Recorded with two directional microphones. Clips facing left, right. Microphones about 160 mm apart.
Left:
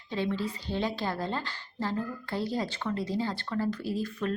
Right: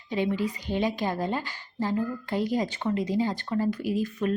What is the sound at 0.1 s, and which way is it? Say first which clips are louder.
A woman's voice: right 4 dB; 15° right (ahead or behind).